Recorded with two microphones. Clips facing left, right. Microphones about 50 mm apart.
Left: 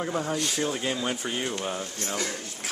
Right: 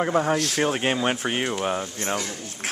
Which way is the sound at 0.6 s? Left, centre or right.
Right.